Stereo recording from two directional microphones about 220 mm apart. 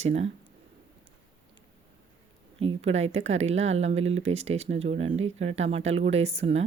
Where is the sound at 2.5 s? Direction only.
25° right (ahead or behind).